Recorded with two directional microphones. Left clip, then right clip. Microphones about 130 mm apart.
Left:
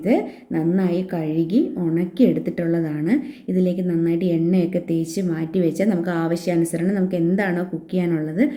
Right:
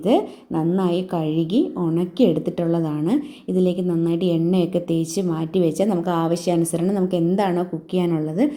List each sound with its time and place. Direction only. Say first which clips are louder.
0.0 s a woman's voice: right 2 dB; 20° right (ahead or behind)